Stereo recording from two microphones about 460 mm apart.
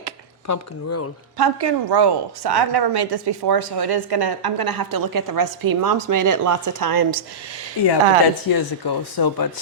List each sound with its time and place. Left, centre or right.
0.4 s speech: left
1.4 s speech: right
8.4 s speech: left